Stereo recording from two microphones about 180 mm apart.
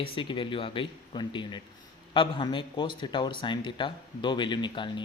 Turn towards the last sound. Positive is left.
turn(degrees=25)  # may be behind; listen again after turning